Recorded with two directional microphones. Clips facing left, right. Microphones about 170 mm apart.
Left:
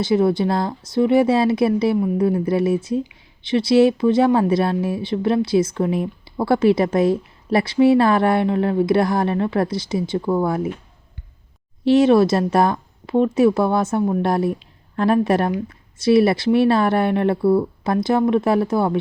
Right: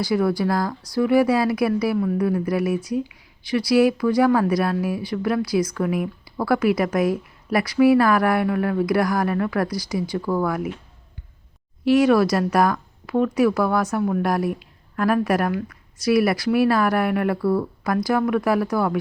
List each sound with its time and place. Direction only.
0.0 s speech: 25° left (ahead or behind)
11.9 s speech: 25° left (ahead or behind)